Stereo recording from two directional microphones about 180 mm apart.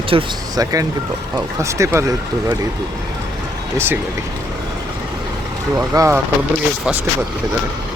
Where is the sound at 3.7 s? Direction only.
10° right (ahead or behind).